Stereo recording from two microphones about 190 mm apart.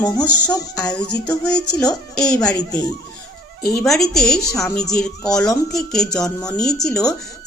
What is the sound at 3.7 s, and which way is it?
A man's voice, centre (ahead or behind).